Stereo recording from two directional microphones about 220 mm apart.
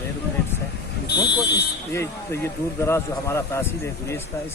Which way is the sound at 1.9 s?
10° left (ahead or behind).